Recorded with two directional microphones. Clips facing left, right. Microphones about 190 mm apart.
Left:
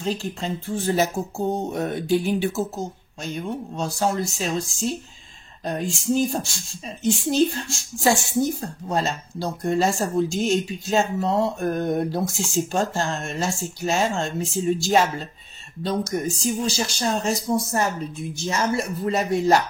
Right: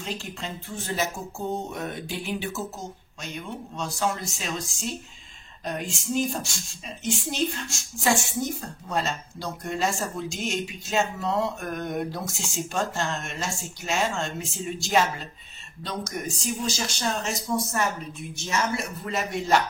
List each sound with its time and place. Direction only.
0.0 s speech: 35° left (ahead or behind)